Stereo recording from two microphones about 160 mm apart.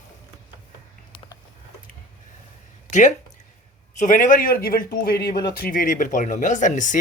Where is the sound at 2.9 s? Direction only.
50° left (ahead or behind).